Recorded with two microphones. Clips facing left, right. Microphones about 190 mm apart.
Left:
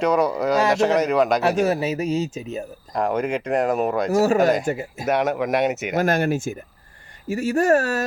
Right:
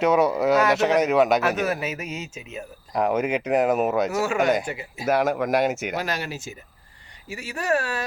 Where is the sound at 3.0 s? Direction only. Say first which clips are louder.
Even; 5° right (ahead or behind).